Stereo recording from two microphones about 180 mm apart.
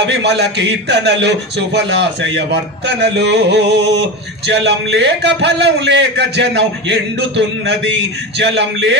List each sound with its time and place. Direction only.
0.1 s a man's voice: 70° right (ahead or behind)